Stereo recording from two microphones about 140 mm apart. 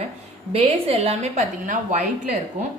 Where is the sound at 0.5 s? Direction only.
45° right (ahead or behind).